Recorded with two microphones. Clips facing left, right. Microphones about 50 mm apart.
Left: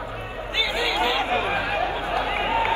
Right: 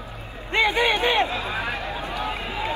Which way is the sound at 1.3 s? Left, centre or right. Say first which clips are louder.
Left 4 dB; left.